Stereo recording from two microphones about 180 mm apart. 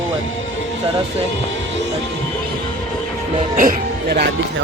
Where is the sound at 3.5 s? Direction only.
50° right (ahead or behind).